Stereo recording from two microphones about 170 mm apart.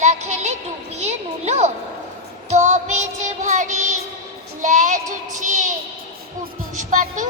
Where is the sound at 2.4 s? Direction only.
40° right (ahead or behind).